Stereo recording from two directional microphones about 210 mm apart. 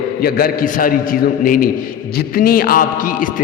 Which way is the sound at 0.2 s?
45° left (ahead or behind).